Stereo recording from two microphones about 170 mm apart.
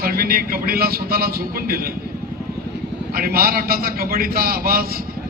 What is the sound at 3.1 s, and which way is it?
A man's voice, 60° right (ahead or behind).